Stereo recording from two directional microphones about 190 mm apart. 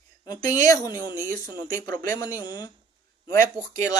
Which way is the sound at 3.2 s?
45° right (ahead or behind).